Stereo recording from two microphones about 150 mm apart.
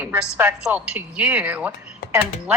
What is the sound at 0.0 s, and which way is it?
A man's voice, 15° right (ahead or behind).